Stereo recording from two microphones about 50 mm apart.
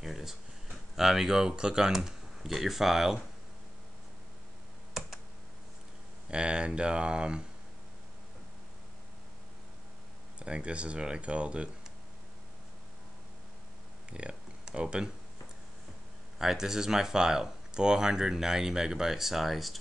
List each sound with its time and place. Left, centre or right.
0.0 s speech: centre
6.3 s speech: centre
10.4 s speech: right
14.1 s speech: centre
16.3 s speech: centre